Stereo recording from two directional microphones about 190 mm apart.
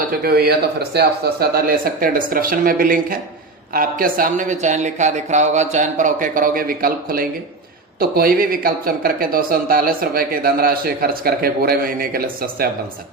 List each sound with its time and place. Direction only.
0.1 s speech: 55° right (ahead or behind)